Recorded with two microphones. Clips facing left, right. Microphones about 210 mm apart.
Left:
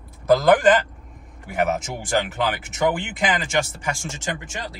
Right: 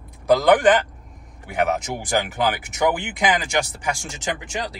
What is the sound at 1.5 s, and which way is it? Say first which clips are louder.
Speech: right 1 dB; centre (ahead or behind).